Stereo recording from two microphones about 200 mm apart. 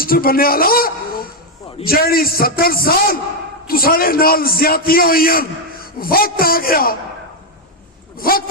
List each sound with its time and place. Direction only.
0.0 s a man's voice: 45° left (ahead or behind)
8.2 s a man's voice: 45° left (ahead or behind)